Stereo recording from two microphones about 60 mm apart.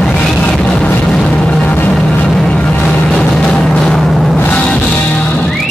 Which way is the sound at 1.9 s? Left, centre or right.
Centre.